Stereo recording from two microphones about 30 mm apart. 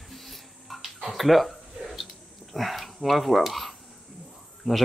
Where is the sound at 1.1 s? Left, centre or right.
Centre.